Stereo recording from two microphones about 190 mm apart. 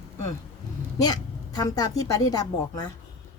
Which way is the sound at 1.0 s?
20° left (ahead or behind).